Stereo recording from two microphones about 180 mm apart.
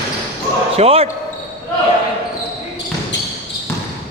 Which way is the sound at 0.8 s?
35° right (ahead or behind).